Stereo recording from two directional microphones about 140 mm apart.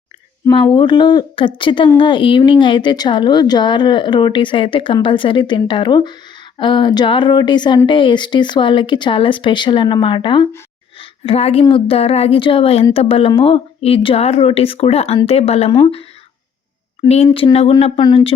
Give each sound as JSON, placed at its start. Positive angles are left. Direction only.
{"t": 0.5, "sound": "speech", "side_deg": 35}
{"t": 11.0, "sound": "a sound", "side_deg": 45}
{"t": 11.7, "sound": "a woman's voice", "side_deg": 40}